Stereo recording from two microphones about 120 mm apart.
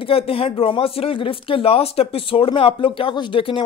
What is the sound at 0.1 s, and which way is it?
Speech, 50° left (ahead or behind).